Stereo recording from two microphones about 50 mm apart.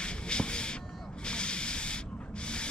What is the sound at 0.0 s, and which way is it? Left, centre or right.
Music, centre.